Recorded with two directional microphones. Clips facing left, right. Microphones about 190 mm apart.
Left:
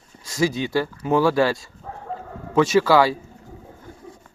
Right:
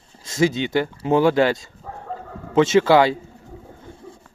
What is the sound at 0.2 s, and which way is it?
Speech, 25° right (ahead or behind).